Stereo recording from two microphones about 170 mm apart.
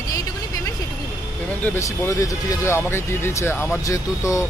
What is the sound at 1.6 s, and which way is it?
Speech, 15° left (ahead or behind).